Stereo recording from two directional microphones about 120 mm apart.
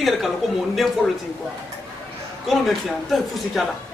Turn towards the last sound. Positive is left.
turn(degrees=0)  # may be behind; listen again after turning